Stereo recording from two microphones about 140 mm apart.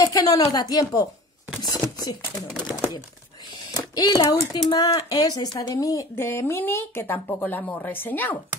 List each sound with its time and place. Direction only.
0.0 s speech: 25° left (ahead or behind)
3.7 s speech: 30° left (ahead or behind)